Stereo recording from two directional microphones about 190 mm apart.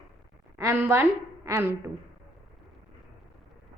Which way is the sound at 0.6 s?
10° right (ahead or behind).